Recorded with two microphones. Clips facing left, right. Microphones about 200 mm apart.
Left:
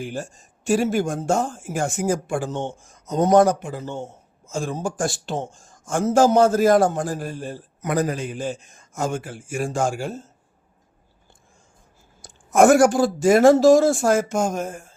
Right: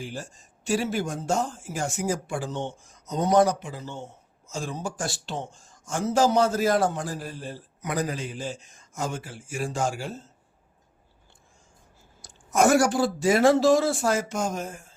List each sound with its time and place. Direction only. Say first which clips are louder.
0.0 s speech: left 6 dB; 50° left (ahead or behind)
12.2 s speech: left 6 dB; 50° left (ahead or behind)